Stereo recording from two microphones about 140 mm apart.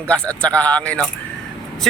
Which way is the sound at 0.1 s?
10° left (ahead or behind).